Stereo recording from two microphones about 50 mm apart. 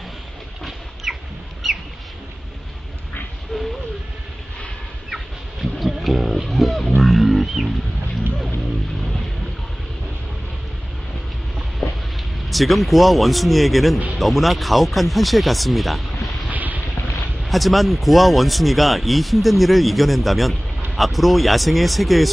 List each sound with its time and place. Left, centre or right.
1.1 s chicken: centre
1.6 s rodents: centre
3.5 s a sound: centre
5.1 s a sound: centre
7.0 s music: centre
11.8 s a sound: centre
12.4 s speech: centre
16.4 s boat: right
17.4 s speech: centre